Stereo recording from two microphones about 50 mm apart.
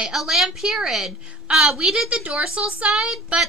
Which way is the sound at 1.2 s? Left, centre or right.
Centre.